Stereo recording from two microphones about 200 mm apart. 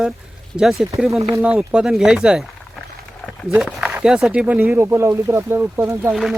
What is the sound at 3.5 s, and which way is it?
Speech, 5° right (ahead or behind).